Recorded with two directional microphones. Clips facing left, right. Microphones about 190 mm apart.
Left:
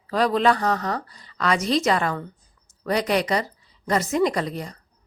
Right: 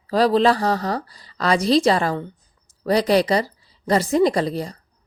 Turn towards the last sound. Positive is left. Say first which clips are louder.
# right 5 dB
turn(degrees=-35)  # may be behind; listen again after turning